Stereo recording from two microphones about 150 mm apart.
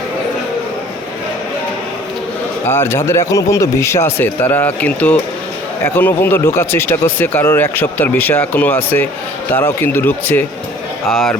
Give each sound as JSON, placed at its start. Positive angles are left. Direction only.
{"t": 2.6, "sound": "speech", "side_deg": 15}
{"t": 11.1, "sound": "speech", "side_deg": 0}